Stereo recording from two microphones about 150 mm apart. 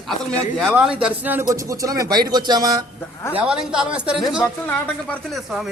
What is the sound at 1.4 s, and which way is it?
Speech, 20° right (ahead or behind).